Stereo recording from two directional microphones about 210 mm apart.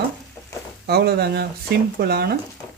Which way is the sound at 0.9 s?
50° right (ahead or behind).